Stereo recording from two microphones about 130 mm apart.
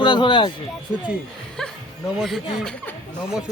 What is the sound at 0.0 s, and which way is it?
Speech, 35° left (ahead or behind).